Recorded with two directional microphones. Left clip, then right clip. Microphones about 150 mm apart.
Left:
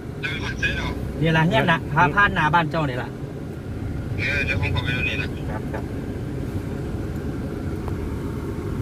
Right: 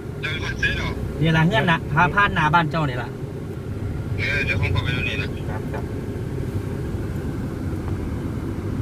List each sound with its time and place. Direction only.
0.2 s vehicle: 20° right (ahead or behind)
1.2 s speech: centre (ahead or behind)